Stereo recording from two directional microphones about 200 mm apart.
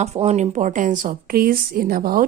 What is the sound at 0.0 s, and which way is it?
Speech, 35° right (ahead or behind).